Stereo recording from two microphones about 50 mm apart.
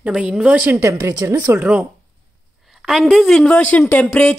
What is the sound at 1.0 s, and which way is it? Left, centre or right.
Speech, right.